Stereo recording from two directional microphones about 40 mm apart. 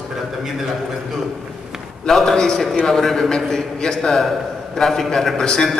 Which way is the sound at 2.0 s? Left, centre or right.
Centre.